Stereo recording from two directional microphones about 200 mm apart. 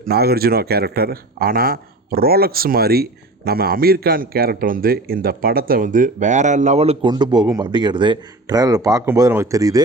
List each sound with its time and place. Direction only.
0.0 s speech: 50° right (ahead or behind); by 9.8 s 15° right (ahead or behind)